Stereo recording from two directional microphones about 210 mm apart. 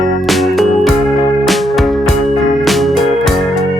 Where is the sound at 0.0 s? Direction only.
Centre (ahead or behind).